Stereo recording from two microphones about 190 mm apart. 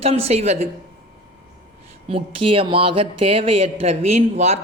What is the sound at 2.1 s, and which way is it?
A woman's voice, 30° right (ahead or behind).